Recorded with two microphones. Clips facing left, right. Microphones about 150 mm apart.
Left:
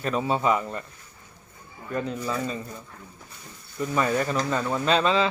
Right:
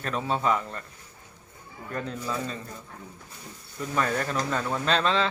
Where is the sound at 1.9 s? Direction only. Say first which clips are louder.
Left 4 dB; 5° left (ahead or behind).